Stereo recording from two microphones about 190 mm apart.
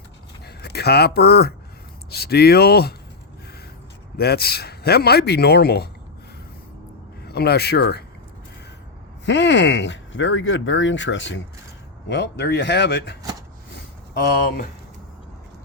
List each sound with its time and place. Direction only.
0.4 s speech: 55° left (ahead or behind)
4.2 s speech: 55° left (ahead or behind)
7.3 s speech: 55° left (ahead or behind)
9.2 s speech: 65° left (ahead or behind)
12.0 s speech: 65° left (ahead or behind)